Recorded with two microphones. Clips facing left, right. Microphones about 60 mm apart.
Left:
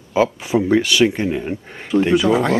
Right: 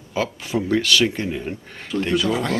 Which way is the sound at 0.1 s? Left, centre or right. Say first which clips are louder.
Left 7 dB; centre.